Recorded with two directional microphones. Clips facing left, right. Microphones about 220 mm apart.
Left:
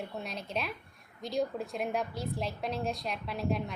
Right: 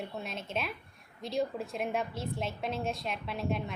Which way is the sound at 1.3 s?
Centre (ahead or behind).